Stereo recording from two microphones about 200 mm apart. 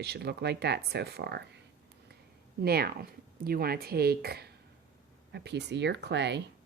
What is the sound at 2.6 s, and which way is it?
Speech, 50° right (ahead or behind).